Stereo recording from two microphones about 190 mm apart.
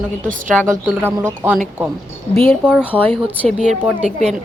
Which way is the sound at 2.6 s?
5° right (ahead or behind).